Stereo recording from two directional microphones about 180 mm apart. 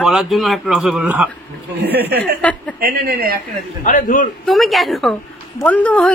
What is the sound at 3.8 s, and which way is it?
Speech, 45° left (ahead or behind).